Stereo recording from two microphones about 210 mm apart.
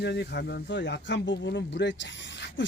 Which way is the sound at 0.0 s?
50° left (ahead or behind).